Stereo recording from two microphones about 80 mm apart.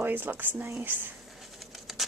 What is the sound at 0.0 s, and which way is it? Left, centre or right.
Speech, right.